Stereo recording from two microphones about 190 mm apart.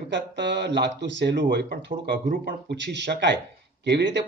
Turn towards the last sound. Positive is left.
turn(degrees=-65)  # may be behind; listen again after turning